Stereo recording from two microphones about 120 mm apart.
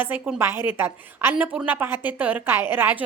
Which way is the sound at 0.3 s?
20° right (ahead or behind).